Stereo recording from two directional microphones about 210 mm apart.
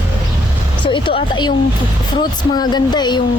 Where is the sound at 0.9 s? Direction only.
25° left (ahead or behind).